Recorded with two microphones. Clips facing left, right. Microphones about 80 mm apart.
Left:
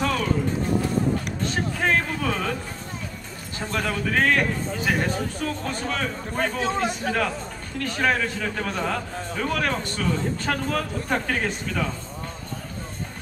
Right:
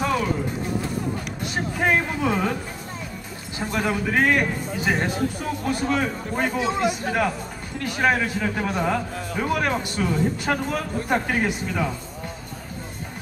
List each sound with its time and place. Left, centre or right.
0.0 s a sound: centre
1.4 s speech: centre
3.5 s a man's voice: centre